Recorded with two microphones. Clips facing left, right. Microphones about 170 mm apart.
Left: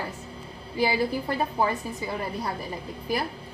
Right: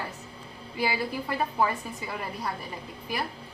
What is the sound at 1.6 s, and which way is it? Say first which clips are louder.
Speech: left 1 dB; 30° left (ahead or behind).